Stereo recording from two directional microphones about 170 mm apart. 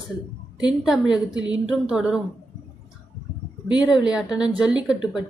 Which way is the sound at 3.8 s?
5° right (ahead or behind).